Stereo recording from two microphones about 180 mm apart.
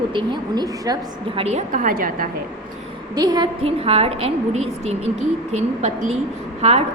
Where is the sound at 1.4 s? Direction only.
35° right (ahead or behind).